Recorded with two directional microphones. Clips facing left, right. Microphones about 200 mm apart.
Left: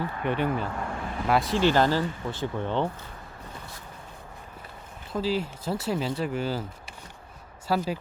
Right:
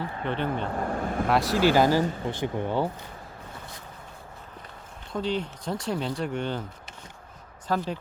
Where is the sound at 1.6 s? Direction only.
10° right (ahead or behind).